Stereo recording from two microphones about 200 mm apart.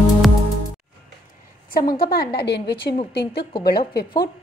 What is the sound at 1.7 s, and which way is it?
A woman's voice, 45° left (ahead or behind).